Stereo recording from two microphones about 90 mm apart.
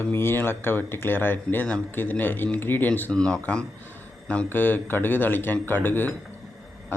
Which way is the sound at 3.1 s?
10° left (ahead or behind).